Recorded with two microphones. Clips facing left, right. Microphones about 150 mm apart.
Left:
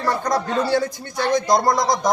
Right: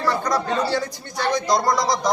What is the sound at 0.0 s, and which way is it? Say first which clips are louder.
Speech: left 1 dB; 50° left (ahead or behind).